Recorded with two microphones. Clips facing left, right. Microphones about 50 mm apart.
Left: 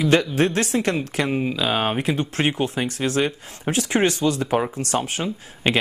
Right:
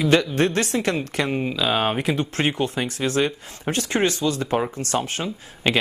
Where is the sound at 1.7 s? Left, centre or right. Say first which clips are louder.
Right 2 dB; centre.